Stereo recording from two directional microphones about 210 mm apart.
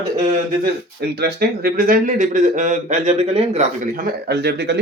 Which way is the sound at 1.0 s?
50° right (ahead or behind).